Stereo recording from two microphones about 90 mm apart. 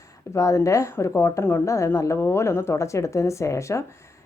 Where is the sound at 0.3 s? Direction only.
35° left (ahead or behind).